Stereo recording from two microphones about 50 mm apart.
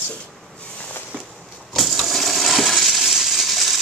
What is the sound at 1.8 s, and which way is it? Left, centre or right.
Coin, centre.